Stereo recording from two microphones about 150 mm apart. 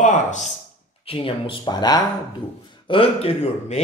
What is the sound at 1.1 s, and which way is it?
Speech, 35° left (ahead or behind).